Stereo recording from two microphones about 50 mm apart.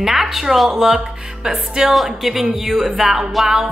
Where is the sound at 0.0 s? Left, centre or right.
Centre.